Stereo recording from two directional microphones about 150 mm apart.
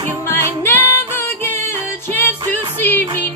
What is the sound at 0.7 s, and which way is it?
Music, 15° left (ahead or behind).